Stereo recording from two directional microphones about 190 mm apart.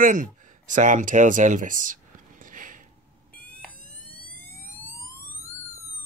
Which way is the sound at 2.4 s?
45° right (ahead or behind).